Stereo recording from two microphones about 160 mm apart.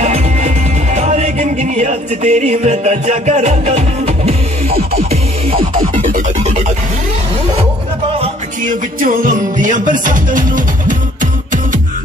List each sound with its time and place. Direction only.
0.0 s music: 45° right (ahead or behind)
4.6 s music: 70° right (ahead or behind)
5.8 s music: 55° right (ahead or behind)
8.6 s music: 60° right (ahead or behind)